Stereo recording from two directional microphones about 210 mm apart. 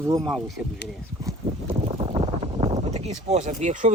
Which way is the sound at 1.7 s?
25° right (ahead or behind).